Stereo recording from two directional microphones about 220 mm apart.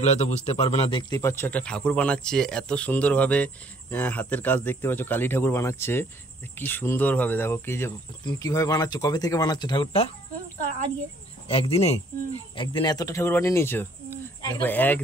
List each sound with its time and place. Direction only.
0.0 s a man's voice: 30° left (ahead or behind)
1.2 s speech: 10° left (ahead or behind)
11.4 s a man's voice: 25° left (ahead or behind); by 15.0 s 10° left (ahead or behind)